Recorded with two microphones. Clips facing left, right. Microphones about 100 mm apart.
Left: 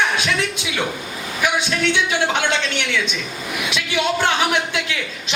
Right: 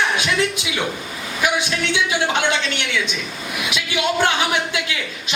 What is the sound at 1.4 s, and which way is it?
Speech, 15° right (ahead or behind).